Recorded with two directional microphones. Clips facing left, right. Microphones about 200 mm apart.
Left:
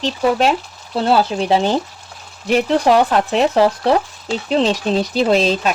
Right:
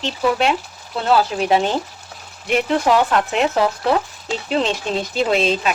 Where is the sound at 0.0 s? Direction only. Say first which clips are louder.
Left 3 dB; 40° left (ahead or behind).